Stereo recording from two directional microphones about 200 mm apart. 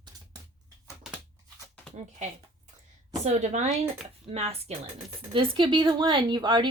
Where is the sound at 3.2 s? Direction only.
35° right (ahead or behind).